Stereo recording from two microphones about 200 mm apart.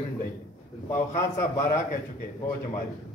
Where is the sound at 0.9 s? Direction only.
15° left (ahead or behind).